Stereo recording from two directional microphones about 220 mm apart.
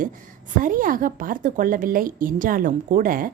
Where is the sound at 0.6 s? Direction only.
40° right (ahead or behind).